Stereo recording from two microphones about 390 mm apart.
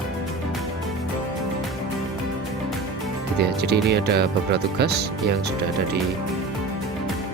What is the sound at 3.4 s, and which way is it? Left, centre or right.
Speech, right.